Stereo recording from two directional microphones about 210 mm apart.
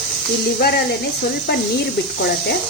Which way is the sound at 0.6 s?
45° left (ahead or behind).